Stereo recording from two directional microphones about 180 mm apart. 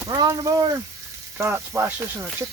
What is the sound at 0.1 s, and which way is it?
Speech, 20° right (ahead or behind).